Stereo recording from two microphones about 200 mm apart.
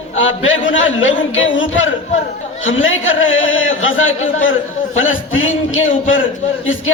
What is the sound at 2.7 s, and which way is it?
A man's voice, 80° left.